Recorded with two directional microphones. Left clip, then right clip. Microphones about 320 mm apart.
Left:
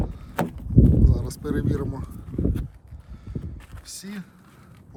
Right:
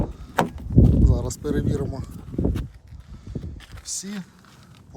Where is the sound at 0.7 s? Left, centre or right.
Centre.